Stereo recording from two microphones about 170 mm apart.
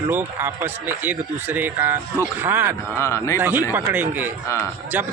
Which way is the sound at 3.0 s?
15° left (ahead or behind).